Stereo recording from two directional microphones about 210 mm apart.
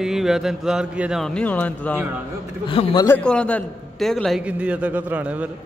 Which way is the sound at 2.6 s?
25° left (ahead or behind).